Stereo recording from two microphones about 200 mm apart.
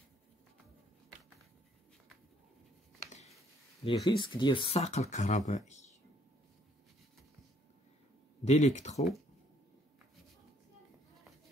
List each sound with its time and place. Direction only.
3.8 s speech: 25° left (ahead or behind)
5.7 s a sound: 35° left (ahead or behind)
8.5 s speech: 35° left (ahead or behind)